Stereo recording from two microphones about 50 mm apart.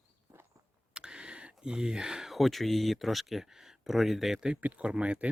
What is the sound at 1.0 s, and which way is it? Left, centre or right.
Speech, centre.